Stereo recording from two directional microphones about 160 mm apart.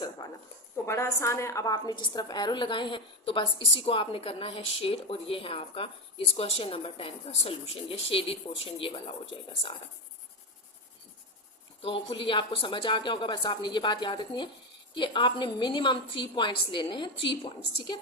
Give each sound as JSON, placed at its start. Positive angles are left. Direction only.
{"t": 0.9, "sound": "a woman's voice", "side_deg": 20}
{"t": 11.8, "sound": "a woman's voice", "side_deg": 35}